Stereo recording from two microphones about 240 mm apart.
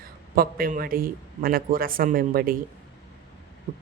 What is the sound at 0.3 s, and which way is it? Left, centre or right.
Speech, right.